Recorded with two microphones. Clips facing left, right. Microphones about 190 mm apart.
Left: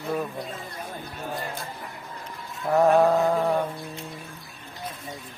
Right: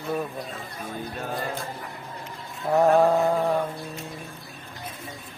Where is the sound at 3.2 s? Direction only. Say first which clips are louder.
Even; centre (ahead or behind).